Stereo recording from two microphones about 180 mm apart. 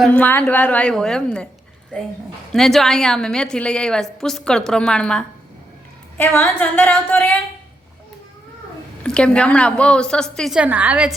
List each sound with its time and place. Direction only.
0.0 s a woman's voice: 10° left (ahead or behind)
2.5 s a woman's voice: centre (ahead or behind)
9.0 s a woman's voice: 5° left (ahead or behind)